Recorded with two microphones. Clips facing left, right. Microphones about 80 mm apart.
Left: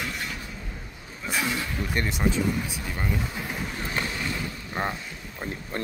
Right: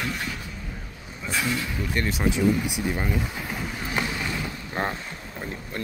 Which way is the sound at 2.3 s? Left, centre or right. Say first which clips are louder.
Right 4 dB; centre.